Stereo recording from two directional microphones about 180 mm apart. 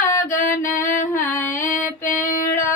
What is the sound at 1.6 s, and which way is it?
Female singing, 45° left (ahead or behind).